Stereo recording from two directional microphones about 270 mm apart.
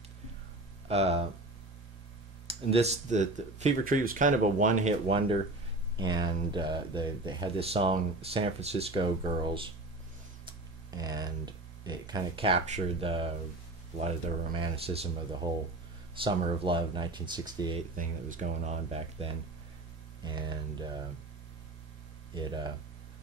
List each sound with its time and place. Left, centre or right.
0.8 s speech: right
2.4 s speech: right
10.9 s speech: centre
17.9 s speech: right
22.3 s speech: centre